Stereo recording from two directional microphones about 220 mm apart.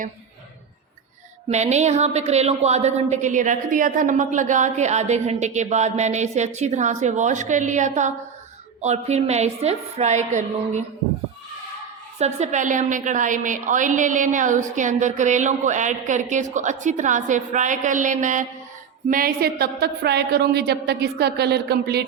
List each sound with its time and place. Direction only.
1.5 s a woman's voice: 30° right (ahead or behind)
12.2 s a woman's voice: 30° right (ahead or behind); by 22.0 s 50° right (ahead or behind)